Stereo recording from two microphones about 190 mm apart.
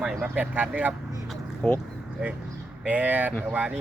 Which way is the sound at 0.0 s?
5° right (ahead or behind).